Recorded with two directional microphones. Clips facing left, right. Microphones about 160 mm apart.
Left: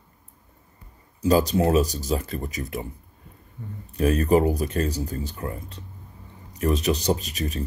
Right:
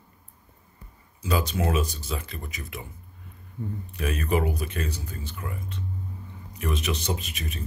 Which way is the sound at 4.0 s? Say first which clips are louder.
Left 7 dB; 40° left (ahead or behind).